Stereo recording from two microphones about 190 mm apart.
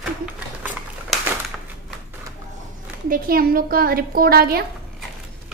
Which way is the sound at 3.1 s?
50° right (ahead or behind).